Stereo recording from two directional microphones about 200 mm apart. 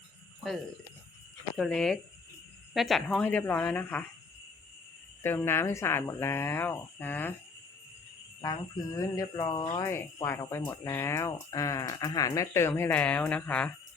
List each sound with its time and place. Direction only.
1.5 s speech: centre (ahead or behind)
5.2 s speech: 10° left (ahead or behind)
8.4 s speech: 20° left (ahead or behind)